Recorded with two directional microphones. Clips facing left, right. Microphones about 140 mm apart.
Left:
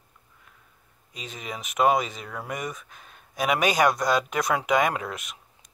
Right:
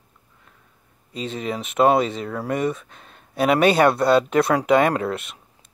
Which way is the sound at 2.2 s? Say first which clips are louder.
Right 8 dB; centre (ahead or behind).